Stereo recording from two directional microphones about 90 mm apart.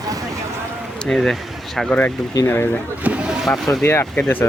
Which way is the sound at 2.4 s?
25° left (ahead or behind).